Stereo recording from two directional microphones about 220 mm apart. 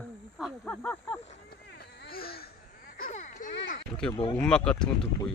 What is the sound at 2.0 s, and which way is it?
Speech, 45° left (ahead or behind).